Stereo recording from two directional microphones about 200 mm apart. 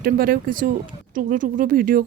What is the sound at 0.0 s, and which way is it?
A woman's voice, 45° right (ahead or behind).